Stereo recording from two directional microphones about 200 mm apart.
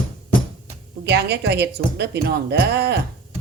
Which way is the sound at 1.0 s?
55° right (ahead or behind).